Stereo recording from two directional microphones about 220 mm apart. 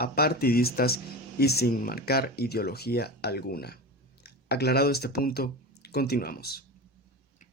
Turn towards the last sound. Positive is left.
turn(degrees=45)  # may be behind; listen again after turning